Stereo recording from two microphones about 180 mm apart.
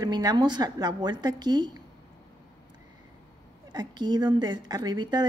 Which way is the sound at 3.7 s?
25° right (ahead or behind).